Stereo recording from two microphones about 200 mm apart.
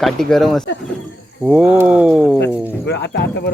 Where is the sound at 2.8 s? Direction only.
60° left (ahead or behind).